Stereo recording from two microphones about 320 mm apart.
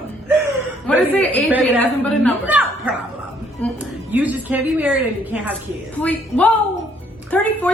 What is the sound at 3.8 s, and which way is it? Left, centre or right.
A woman's voice, centre.